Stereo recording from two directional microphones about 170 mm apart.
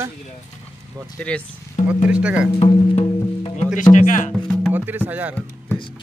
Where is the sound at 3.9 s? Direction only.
50° left (ahead or behind).